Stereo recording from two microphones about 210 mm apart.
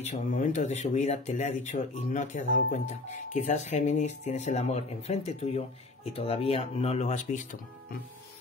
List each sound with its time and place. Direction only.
0.0 s speech: 35° left (ahead or behind)